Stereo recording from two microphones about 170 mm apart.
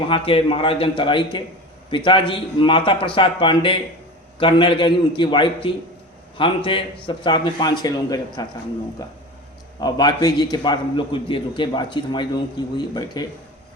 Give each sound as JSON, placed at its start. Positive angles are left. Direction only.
{"t": 0.1, "sound": "a man's voice", "side_deg": 30}